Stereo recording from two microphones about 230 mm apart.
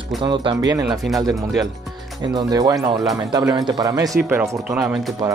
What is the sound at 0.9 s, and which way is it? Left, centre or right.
Speech, centre.